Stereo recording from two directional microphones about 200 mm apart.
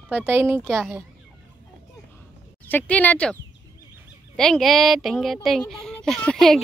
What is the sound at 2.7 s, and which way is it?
Speech, 10° left (ahead or behind).